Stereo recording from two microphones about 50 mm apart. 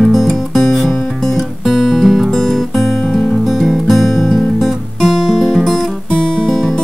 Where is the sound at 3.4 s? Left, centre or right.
Centre.